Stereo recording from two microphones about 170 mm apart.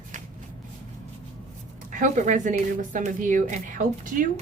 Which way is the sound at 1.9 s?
50° right (ahead or behind).